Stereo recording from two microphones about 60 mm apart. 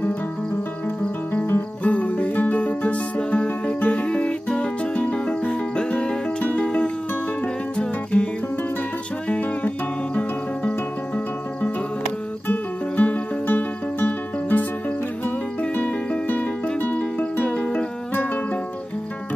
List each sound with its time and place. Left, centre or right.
1.3 s music: left; by 8.3 s centre
9.3 s music: left
12.4 s music: left
16.6 s music: left